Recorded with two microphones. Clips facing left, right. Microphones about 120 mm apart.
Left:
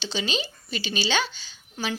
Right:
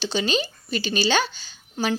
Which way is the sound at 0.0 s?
45° right (ahead or behind).